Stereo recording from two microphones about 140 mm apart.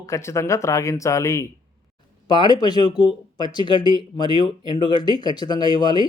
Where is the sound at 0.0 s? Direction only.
20° left (ahead or behind).